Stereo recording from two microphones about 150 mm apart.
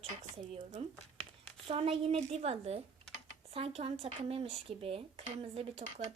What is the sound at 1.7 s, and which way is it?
Speech, 40° right (ahead or behind).